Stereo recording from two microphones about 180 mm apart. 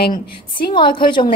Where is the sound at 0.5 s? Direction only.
25° left (ahead or behind).